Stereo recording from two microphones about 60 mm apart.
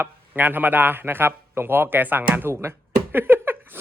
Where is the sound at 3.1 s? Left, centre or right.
Right.